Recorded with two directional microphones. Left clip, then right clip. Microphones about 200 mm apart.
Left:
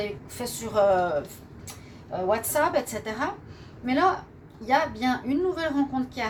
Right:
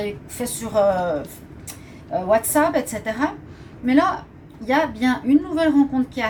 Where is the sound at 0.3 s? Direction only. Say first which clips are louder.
Right 4 dB; 35° left (ahead or behind).